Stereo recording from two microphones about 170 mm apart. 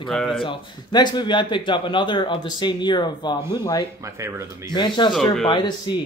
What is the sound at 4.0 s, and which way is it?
Speech, 15° right (ahead or behind).